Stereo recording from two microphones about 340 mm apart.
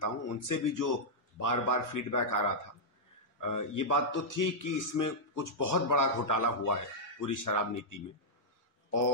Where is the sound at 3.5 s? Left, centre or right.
Left.